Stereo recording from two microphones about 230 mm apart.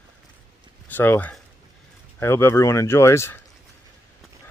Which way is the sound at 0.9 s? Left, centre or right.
Centre.